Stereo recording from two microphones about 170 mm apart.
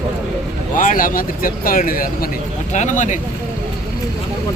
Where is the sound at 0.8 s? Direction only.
50° left (ahead or behind).